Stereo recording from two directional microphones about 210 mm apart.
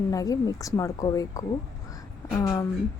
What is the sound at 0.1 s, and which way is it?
Speech, 15° left (ahead or behind).